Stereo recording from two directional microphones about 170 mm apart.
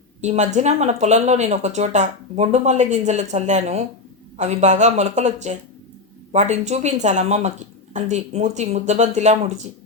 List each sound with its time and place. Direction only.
0.2 s speech: 40° right (ahead or behind)